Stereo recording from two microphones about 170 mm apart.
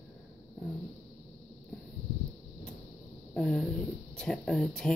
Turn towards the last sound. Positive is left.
turn(degrees=5)  # may be behind; listen again after turning